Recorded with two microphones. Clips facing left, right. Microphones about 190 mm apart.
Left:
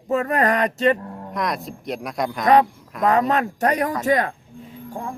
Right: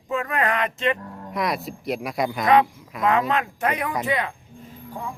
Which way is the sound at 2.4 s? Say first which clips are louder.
Left 3 dB; 40° left (ahead or behind).